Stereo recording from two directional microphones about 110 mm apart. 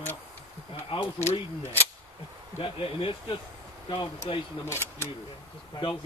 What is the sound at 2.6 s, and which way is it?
Speech, 55° left (ahead or behind).